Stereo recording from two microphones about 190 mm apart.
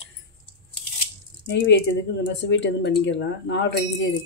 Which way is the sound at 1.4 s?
70° left (ahead or behind).